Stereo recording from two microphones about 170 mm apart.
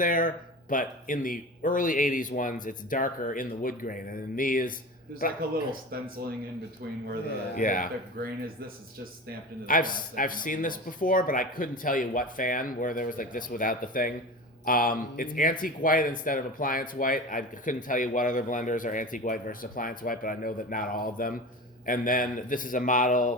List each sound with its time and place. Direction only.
0.0 s a man's voice: 55° left (ahead or behind)
6.2 s speech: 65° right (ahead or behind)
7.5 s a man's voice: 55° left (ahead or behind)
9.6 s a man's voice: 55° left (ahead or behind)